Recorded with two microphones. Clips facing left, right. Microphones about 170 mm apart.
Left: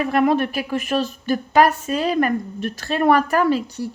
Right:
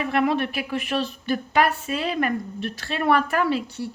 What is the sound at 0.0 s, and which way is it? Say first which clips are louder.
A woman's voice: left 4 dB; 45° left (ahead or behind).